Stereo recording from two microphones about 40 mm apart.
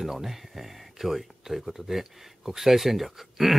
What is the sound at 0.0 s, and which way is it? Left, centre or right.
Speech, centre.